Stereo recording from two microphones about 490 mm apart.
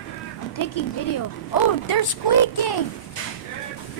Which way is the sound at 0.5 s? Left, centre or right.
Left.